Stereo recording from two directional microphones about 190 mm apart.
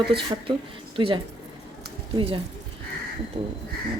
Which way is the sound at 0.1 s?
25° right (ahead or behind).